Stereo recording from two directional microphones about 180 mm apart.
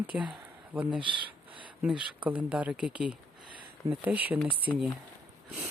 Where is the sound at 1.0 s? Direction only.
25° right (ahead or behind).